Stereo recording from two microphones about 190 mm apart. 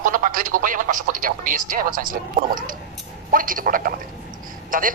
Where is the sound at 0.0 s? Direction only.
45° right (ahead or behind).